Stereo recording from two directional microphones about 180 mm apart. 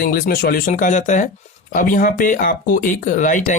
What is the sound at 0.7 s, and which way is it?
Speech, 45° left (ahead or behind).